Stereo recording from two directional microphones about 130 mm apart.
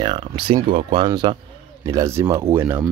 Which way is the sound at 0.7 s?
40° right (ahead or behind).